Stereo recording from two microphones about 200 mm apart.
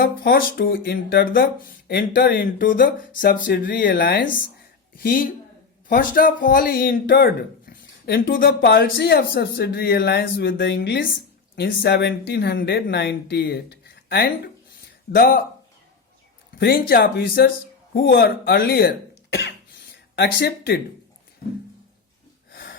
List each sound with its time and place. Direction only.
0.0 s speech: 45° left (ahead or behind)
16.6 s speech: 55° left (ahead or behind)
21.4 s a sound: 50° left (ahead or behind)